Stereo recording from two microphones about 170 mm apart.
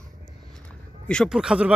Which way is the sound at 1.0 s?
5° left (ahead or behind).